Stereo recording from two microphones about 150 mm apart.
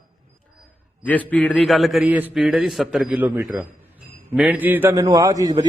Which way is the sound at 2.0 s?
10° right (ahead or behind).